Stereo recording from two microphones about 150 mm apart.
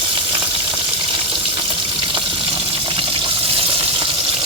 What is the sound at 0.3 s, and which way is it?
Frying, 35° right (ahead or behind).